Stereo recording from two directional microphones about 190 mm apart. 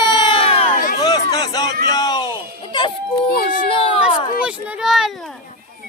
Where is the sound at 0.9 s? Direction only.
20° left (ahead or behind).